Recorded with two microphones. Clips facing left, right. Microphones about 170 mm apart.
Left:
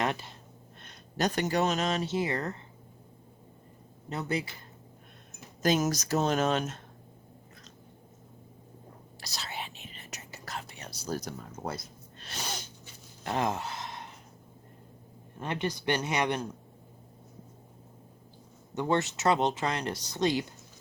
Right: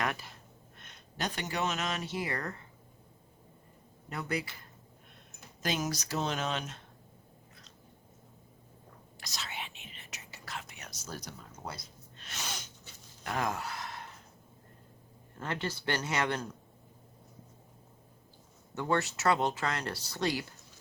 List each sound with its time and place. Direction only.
0.0 s speech: 25° left (ahead or behind)
0.8 s speech: 40° left (ahead or behind)
4.1 s speech: 25° left (ahead or behind)
5.6 s speech: 45° left (ahead or behind)
9.2 s whispering: 35° left (ahead or behind)
11.2 s speech: 50° left (ahead or behind)
13.2 s gasp: 25° left (ahead or behind)
15.4 s speech: 20° left (ahead or behind)
18.7 s speech: 20° left (ahead or behind)